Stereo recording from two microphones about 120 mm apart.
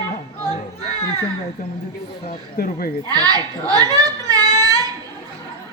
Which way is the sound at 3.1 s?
30° right (ahead or behind).